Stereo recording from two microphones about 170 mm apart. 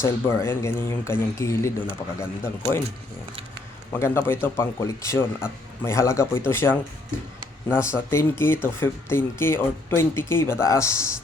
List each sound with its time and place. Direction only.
0.0 s speech: 15° left (ahead or behind)
3.9 s speech: 15° left (ahead or behind)